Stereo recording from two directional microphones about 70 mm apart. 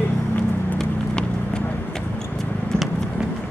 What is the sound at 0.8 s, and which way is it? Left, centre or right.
Vehicle, centre.